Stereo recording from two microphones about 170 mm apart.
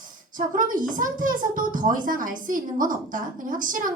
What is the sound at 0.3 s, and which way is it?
A woman's voice, 55° right (ahead or behind).